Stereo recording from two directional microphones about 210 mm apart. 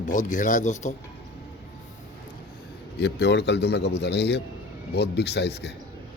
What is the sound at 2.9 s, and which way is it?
A man's voice, 55° left (ahead or behind).